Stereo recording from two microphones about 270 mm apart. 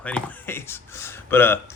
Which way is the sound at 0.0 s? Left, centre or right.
Centre.